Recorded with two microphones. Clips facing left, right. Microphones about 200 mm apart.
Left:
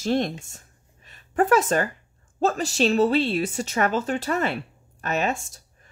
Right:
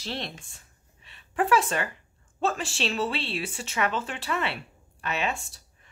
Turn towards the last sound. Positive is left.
turn(degrees=40)  # may be behind; listen again after turning